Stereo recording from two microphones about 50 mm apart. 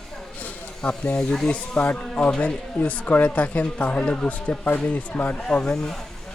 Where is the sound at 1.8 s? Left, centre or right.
Left.